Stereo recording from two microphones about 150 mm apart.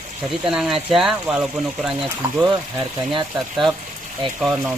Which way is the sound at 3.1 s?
35° right (ahead or behind).